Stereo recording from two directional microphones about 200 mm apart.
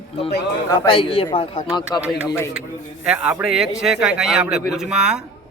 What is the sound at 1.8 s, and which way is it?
Speech, 15° left (ahead or behind).